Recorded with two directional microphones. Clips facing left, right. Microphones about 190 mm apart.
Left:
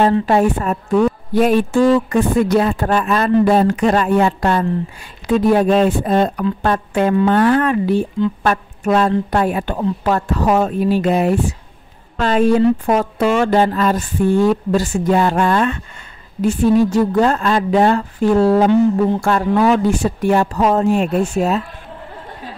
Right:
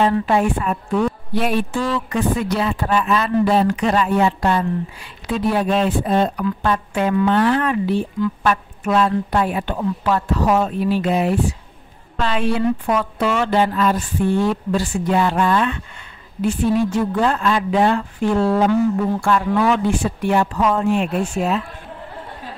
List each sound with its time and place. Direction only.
0.3 s a woman's voice: 40° left (ahead or behind)